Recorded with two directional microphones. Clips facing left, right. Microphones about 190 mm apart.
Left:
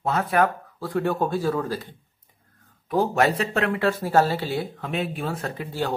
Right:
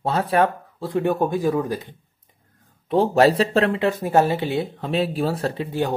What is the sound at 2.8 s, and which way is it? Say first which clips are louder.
Speech: right 5 dB; 30° right (ahead or behind).